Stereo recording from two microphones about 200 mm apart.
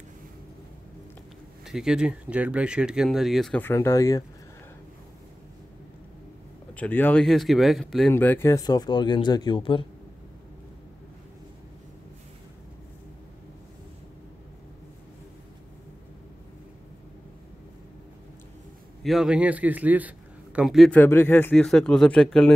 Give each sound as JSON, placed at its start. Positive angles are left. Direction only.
{"t": 1.7, "sound": "a man's voice", "side_deg": -5}
{"t": 6.7, "sound": "a man's voice", "side_deg": 10}
{"t": 19.0, "sound": "a man's voice", "side_deg": -5}